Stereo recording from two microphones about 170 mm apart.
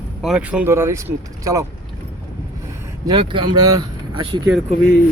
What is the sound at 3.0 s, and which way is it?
Speech, 25° right (ahead or behind).